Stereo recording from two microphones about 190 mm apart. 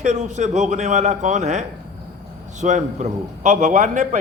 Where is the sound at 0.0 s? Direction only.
40° right (ahead or behind).